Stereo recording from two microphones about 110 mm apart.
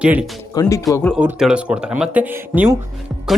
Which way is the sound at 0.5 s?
35° left (ahead or behind).